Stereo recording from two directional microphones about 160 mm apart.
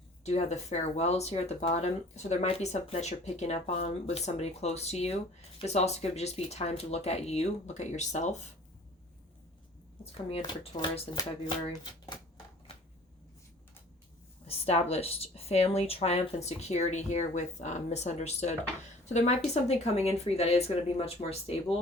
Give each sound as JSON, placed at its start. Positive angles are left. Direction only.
{"t": 0.3, "sound": "speech", "side_deg": 45}
{"t": 10.0, "sound": "speech", "side_deg": 35}
{"t": 14.4, "sound": "speech", "side_deg": 40}